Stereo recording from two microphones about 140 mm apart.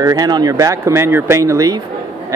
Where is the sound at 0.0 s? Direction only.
25° right (ahead or behind).